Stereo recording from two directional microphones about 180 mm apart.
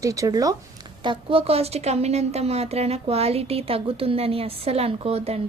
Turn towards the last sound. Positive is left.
turn(degrees=-35)  # may be behind; listen again after turning